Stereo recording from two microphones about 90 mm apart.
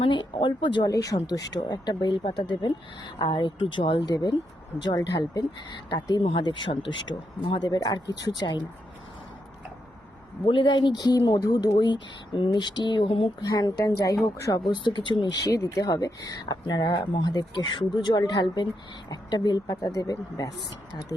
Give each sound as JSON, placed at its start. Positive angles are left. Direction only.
{"t": 0.0, "sound": "speech", "side_deg": 65}
{"t": 0.9, "sound": "speech", "side_deg": 45}
{"t": 6.2, "sound": "speech", "side_deg": 70}
{"t": 10.4, "sound": "speech", "side_deg": 60}
{"t": 13.4, "sound": "speech", "side_deg": 45}
{"t": 15.0, "sound": "speech", "side_deg": 55}
{"t": 15.4, "sound": "speech", "side_deg": 40}
{"t": 16.5, "sound": "speech", "side_deg": 55}